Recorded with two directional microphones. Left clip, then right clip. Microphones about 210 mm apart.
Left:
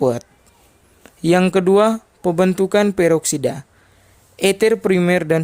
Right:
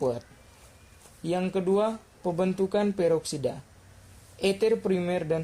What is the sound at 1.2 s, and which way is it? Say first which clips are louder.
Speech: left 13 dB; 45° left (ahead or behind).